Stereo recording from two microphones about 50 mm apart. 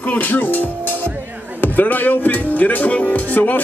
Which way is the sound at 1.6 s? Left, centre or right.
Left.